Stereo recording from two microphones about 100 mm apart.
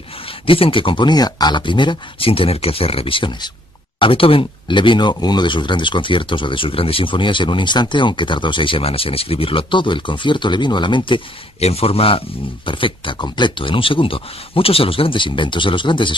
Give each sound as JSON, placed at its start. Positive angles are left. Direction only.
{"t": 0.2, "sound": "speech", "side_deg": 65}
{"t": 4.0, "sound": "speech", "side_deg": 65}
{"t": 11.6, "sound": "speech", "side_deg": 80}